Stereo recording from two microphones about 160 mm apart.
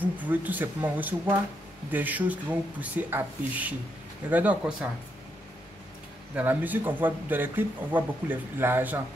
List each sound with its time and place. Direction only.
0.0 s speech: 10° right (ahead or behind)
6.3 s speech: 10° right (ahead or behind)